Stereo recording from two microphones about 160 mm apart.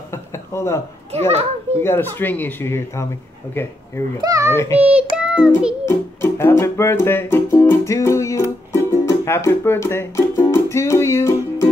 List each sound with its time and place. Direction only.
0.1 s speech: 15° left (ahead or behind)
1.1 s a child's voice: 40° right (ahead or behind)
1.8 s speech: 15° left (ahead or behind)
4.2 s a child's voice: 20° right (ahead or behind)
4.5 s speech: 15° left (ahead or behind)
4.7 s child singing: 10° right (ahead or behind)
5.9 s music: 15° left (ahead or behind)